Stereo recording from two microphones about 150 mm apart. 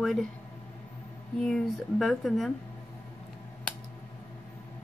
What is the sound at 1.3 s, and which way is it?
Speech, 5° left (ahead or behind).